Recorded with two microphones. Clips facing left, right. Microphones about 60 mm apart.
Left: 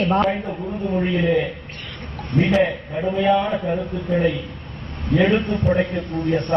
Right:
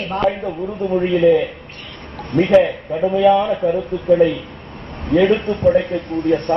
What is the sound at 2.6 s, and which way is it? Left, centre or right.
A woman's voice, centre.